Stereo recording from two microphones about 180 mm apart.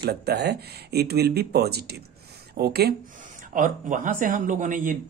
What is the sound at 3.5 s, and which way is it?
Speech, 45° right (ahead or behind).